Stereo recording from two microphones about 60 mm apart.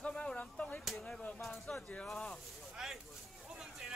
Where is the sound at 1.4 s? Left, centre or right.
Centre.